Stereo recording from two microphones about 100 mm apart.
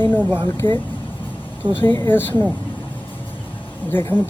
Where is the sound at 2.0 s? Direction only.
20° left (ahead or behind).